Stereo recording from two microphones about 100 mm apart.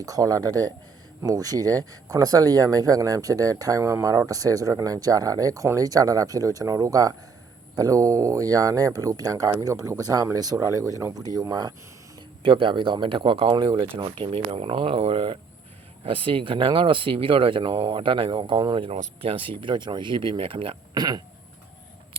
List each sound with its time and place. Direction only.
0.0 s speech: 35° right (ahead or behind)
12.4 s speech: 60° right (ahead or behind)
20.9 s speech: 45° right (ahead or behind)